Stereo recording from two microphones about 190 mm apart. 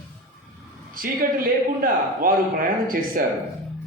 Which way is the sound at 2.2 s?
50° right (ahead or behind).